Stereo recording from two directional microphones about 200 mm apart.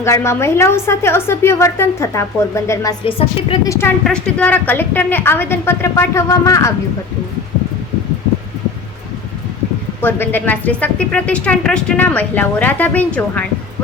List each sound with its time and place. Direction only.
0.0 s speech: 15° left (ahead or behind)
3.1 s a woman's voice: 25° left (ahead or behind)
3.7 s speech: 10° left (ahead or behind)
10.0 s speech: 10° left (ahead or behind)